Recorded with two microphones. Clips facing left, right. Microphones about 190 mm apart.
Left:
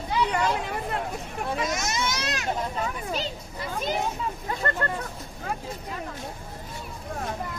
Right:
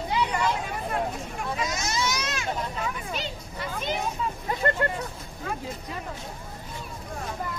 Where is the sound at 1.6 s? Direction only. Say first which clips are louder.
Right 2 dB; 50° left (ahead or behind).